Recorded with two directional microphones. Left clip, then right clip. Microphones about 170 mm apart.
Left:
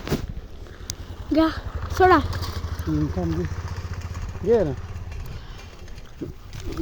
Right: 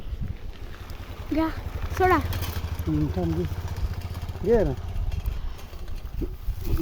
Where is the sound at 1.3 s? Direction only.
25° left (ahead or behind).